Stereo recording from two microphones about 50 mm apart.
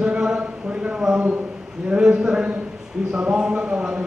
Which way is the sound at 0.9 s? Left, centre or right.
Centre.